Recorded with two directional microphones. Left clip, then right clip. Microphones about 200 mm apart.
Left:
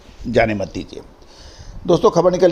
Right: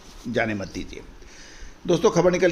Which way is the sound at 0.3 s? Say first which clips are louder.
Left 9 dB; 30° left (ahead or behind).